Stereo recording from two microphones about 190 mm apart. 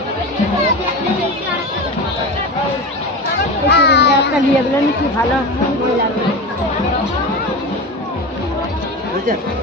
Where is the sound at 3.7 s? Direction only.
60° left (ahead or behind).